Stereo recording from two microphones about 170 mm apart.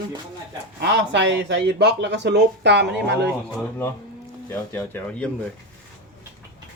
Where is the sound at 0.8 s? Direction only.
90° right.